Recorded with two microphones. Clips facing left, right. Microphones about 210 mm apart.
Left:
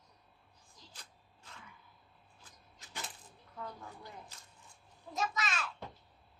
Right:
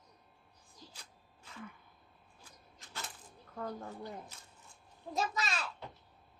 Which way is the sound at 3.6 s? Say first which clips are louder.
Right 6 dB; 45° right (ahead or behind).